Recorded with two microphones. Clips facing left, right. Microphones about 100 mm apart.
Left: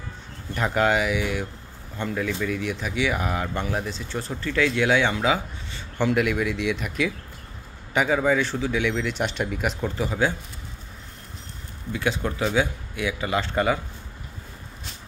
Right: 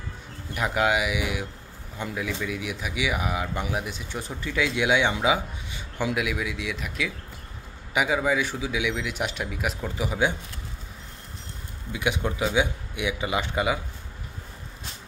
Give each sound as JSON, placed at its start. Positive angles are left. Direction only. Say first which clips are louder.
{"t": 0.6, "sound": "a man's voice", "louder": "left 2 dB", "side_deg": -5}
{"t": 11.9, "sound": "a man's voice", "louder": "left 1 dB", "side_deg": -15}